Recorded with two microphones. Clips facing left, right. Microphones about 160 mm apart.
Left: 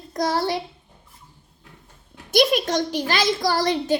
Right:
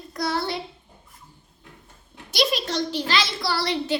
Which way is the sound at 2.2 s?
55° left (ahead or behind).